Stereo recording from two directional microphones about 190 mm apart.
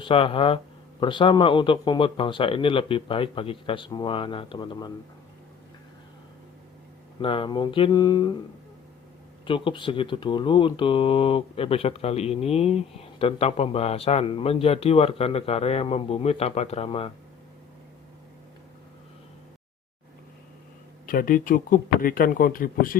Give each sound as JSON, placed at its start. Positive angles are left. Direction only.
{"t": 0.0, "sound": "a man's voice", "side_deg": 30}
{"t": 7.2, "sound": "a man's voice", "side_deg": 25}
{"t": 9.5, "sound": "speech", "side_deg": 25}
{"t": 21.1, "sound": "speech", "side_deg": 45}